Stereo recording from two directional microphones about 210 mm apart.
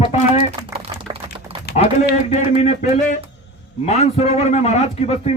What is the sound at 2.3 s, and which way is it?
A man's voice, 30° left (ahead or behind).